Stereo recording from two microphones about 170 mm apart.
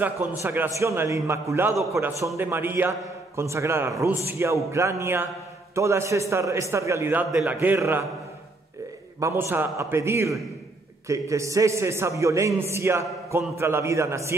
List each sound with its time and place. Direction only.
0.0 s a man's voice: 10° right (ahead or behind)
9.2 s a man's voice: 15° right (ahead or behind)